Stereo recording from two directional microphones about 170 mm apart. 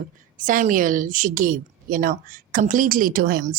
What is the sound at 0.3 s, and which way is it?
A woman's voice, 50° right (ahead or behind).